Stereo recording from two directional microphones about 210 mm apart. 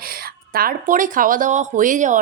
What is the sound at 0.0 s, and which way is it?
Speech, 45° right (ahead or behind).